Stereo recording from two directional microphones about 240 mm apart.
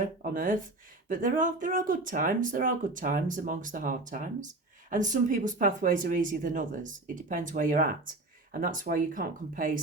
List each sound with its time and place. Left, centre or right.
0.0 s speech: right